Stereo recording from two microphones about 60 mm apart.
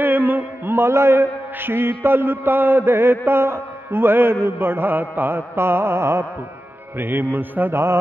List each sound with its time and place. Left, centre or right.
0.0 s mantra: right
7.0 s mantra: right